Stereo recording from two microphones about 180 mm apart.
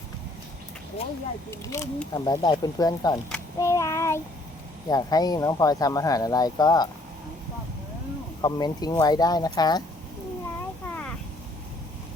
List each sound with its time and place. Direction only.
1.5 s speech: 15° left (ahead or behind)
3.6 s child singing: 15° left (ahead or behind)
4.9 s speech: 20° left (ahead or behind)
8.4 s speech: 25° left (ahead or behind)
10.8 s a sound: 10° left (ahead or behind)